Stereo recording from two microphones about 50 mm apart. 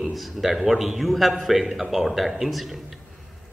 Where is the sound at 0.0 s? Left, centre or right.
Centre.